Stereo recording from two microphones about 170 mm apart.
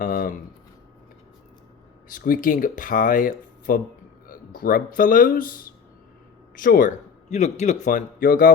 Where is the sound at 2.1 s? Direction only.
55° left (ahead or behind).